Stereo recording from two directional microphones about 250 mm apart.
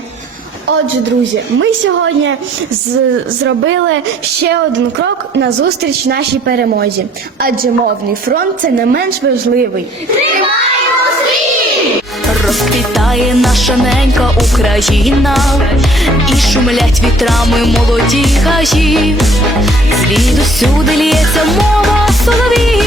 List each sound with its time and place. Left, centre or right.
1.5 s a woman's voice: right
3.4 s a woman's voice: right
5.4 s speech: right
8.3 s speech: right
13.1 s music: centre